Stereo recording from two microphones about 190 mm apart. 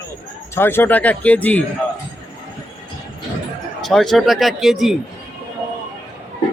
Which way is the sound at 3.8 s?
Centre (ahead or behind).